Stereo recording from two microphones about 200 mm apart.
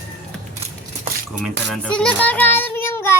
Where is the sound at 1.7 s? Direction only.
5° left (ahead or behind).